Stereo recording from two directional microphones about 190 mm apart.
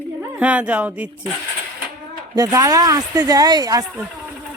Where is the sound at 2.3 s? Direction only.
20° right (ahead or behind).